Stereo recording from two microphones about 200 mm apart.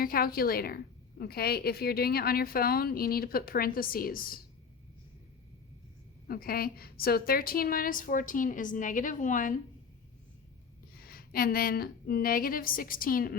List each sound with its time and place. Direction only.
0.0 s a woman's voice: 45° left (ahead or behind)
6.2 s a woman's voice: 50° left (ahead or behind)
10.9 s a woman's voice: 50° left (ahead or behind)